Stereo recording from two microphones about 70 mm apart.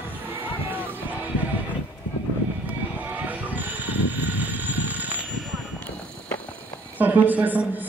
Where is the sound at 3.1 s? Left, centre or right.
Right.